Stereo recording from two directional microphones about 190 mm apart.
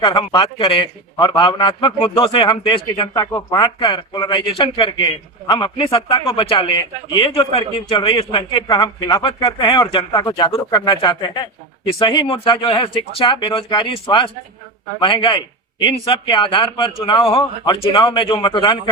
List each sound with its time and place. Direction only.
0.0 s a man's voice: 25° left (ahead or behind)